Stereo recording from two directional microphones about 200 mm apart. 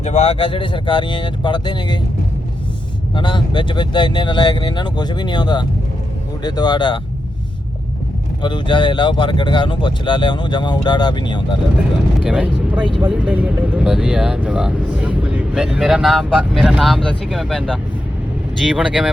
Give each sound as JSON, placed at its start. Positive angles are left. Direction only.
{"t": 0.0, "sound": "speech", "side_deg": 35}
{"t": 3.2, "sound": "speech", "side_deg": 25}
{"t": 8.4, "sound": "speech", "side_deg": 20}
{"t": 12.2, "sound": "speech", "side_deg": -5}